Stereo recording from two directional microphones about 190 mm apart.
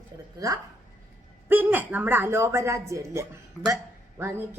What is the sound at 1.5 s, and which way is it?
Speech, 10° right (ahead or behind).